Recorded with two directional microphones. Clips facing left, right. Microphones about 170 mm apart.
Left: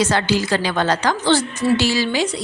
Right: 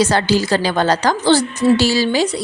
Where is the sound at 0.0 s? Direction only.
35° right (ahead or behind).